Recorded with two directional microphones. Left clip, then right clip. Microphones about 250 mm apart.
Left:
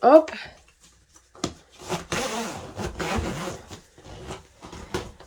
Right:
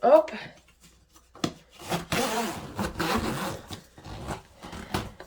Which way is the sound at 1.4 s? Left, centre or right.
Left.